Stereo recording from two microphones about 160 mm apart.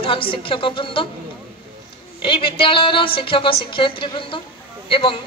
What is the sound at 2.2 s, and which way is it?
A woman's voice, 35° left (ahead or behind).